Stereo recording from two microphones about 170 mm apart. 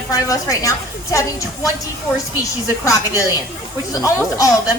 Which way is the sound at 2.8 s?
20° left (ahead or behind).